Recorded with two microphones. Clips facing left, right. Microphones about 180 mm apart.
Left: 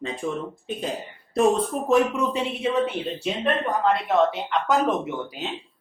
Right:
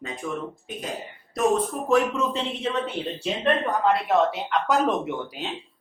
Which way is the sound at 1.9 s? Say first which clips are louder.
Left 1 dB; 15° left (ahead or behind).